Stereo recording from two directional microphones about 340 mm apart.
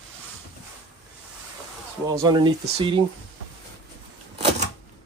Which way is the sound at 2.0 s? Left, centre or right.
Centre.